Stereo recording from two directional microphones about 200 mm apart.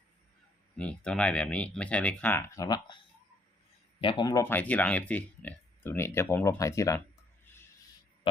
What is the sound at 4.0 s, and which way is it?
Speech, 25° left (ahead or behind).